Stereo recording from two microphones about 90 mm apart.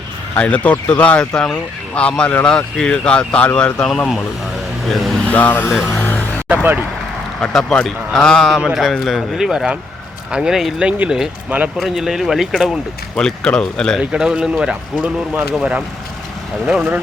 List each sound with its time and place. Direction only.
0.3 s speech: 15° left (ahead or behind)
5.2 s speech: 15° left (ahead or behind)
5.8 s music: 25° left (ahead or behind)
6.5 s speech: 20° right (ahead or behind)
7.4 s speech: 10° left (ahead or behind)
13.1 s speech: 10° left (ahead or behind)
14.0 s speech: 10° right (ahead or behind)